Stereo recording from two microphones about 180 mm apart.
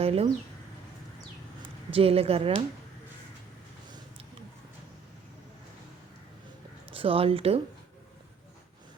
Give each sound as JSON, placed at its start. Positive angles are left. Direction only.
{"t": 0.0, "sound": "speech", "side_deg": -35}
{"t": 1.9, "sound": "speech", "side_deg": -30}
{"t": 6.9, "sound": "speech", "side_deg": -30}